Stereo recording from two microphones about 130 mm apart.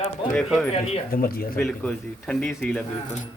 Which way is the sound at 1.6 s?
5° left (ahead or behind).